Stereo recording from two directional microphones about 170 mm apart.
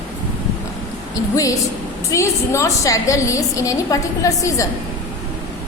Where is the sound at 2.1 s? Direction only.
20° left (ahead or behind).